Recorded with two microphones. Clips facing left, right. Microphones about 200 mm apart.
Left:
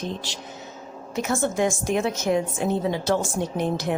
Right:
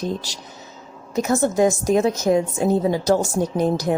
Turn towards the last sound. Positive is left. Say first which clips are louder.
# right 5 dB
turn(degrees=-40)  # may be behind; listen again after turning